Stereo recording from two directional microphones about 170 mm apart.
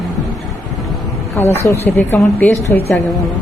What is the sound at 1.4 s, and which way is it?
A woman's voice, 10° left (ahead or behind).